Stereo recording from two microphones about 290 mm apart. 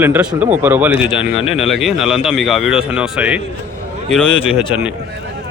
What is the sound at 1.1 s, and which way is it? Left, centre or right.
Speech, centre.